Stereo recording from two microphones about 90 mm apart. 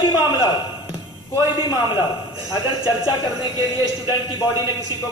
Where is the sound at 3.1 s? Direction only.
50° left (ahead or behind).